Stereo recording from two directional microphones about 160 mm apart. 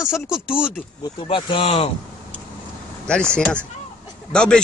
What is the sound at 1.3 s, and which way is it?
Speech, 35° left (ahead or behind).